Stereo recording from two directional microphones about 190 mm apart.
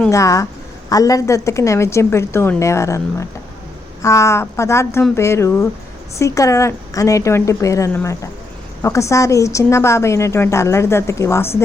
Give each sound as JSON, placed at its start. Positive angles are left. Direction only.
{"t": 0.1, "sound": "a woman's voice", "side_deg": 15}